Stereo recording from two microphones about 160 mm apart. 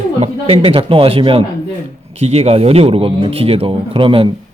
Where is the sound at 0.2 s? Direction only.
35° right (ahead or behind).